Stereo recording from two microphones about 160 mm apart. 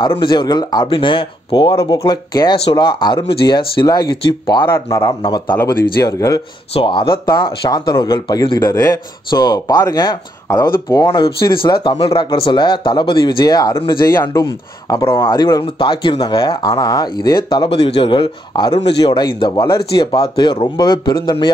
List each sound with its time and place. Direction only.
0.0 s speech: 30° left (ahead or behind)
5.5 s speech: 15° left (ahead or behind)
6.7 s speech: 35° left (ahead or behind)
17.7 s a man's voice: 35° left (ahead or behind)